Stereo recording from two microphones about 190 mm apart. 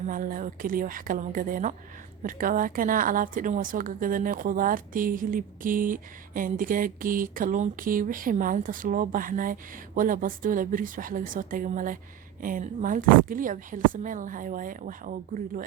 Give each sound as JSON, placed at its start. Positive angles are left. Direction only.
{"t": 0.0, "sound": "a woman's voice", "side_deg": -45}